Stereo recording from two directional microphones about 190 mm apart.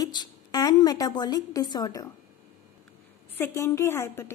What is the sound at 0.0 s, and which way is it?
A woman's voice, 20° left (ahead or behind).